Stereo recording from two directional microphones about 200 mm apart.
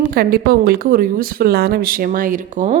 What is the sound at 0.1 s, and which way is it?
Speech, 50° right (ahead or behind).